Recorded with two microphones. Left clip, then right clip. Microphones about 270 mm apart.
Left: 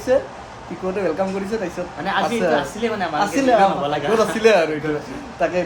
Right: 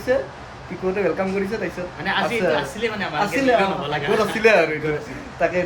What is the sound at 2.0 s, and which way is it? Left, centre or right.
Speech, left.